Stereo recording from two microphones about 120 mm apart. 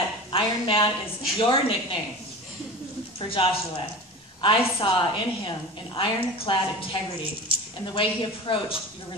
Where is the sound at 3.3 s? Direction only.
50° left (ahead or behind).